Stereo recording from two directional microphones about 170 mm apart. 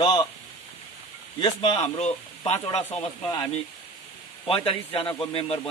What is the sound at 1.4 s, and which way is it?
A man's voice, 30° left (ahead or behind).